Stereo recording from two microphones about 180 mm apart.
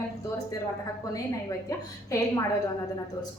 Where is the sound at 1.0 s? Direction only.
20° left (ahead or behind).